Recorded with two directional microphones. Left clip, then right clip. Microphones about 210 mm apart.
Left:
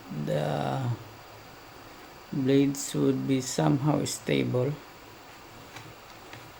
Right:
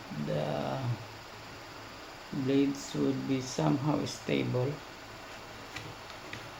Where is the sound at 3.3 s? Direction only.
55° left (ahead or behind).